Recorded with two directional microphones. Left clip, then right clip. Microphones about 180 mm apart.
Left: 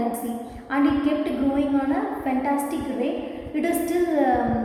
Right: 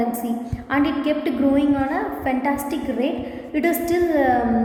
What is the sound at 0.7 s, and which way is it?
Speech, 50° right (ahead or behind).